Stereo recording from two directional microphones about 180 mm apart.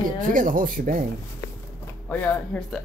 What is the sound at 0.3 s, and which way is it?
Speech, 50° right (ahead or behind).